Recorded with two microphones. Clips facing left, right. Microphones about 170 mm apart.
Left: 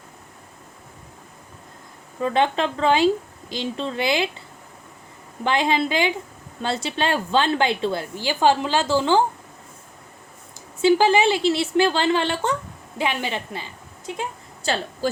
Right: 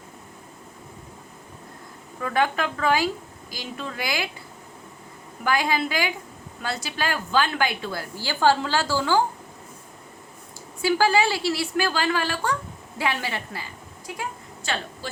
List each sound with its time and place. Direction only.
2.2 s a woman's voice: 25° left (ahead or behind)
5.4 s a woman's voice: 25° left (ahead or behind)
10.8 s a woman's voice: 20° left (ahead or behind)
14.6 s speech: 35° left (ahead or behind)